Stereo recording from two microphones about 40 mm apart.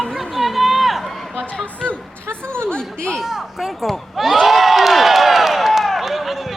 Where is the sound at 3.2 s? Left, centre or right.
Centre.